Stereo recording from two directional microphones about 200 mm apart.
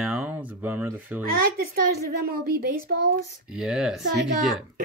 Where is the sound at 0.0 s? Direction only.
5° right (ahead or behind).